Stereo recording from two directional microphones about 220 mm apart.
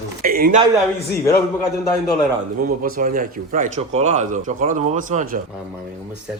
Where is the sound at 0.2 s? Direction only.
40° right (ahead or behind).